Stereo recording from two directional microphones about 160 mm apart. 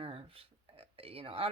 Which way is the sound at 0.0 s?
35° right (ahead or behind).